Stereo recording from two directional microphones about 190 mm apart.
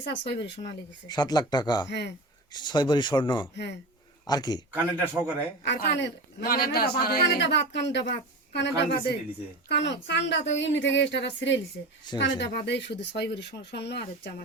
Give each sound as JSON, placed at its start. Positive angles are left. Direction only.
{"t": 0.0, "sound": "a woman's voice", "side_deg": 65}
{"t": 1.0, "sound": "speech", "side_deg": 20}
{"t": 1.9, "sound": "a man's voice", "side_deg": 65}
{"t": 2.5, "sound": "speech", "side_deg": 25}
{"t": 3.5, "sound": "a man's voice", "side_deg": 65}
{"t": 4.3, "sound": "speech", "side_deg": 20}
{"t": 4.7, "sound": "speech", "side_deg": -10}
{"t": 5.6, "sound": "a man's voice", "side_deg": 65}